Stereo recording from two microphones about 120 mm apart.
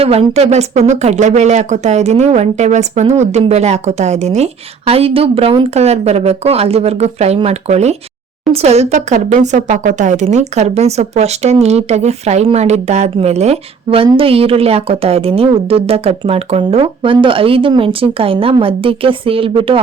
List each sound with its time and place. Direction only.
0.0 s a woman's voice: 55° right (ahead or behind)
4.9 s a woman's voice: 55° right (ahead or behind)